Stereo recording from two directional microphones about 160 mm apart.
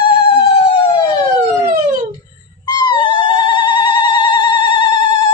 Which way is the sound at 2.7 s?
30° left (ahead or behind).